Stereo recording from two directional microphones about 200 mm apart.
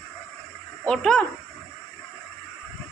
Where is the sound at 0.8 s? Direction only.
5° left (ahead or behind).